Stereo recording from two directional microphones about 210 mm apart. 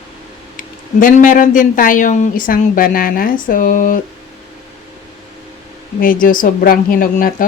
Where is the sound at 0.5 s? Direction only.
40° left (ahead or behind).